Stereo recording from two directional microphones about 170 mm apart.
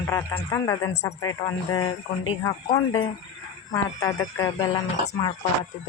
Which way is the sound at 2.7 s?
25° left (ahead or behind).